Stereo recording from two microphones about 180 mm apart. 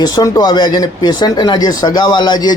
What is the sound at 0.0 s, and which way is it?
Speech, 20° left (ahead or behind).